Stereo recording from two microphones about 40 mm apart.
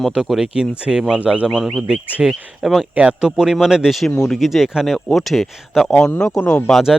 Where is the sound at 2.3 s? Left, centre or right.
Centre.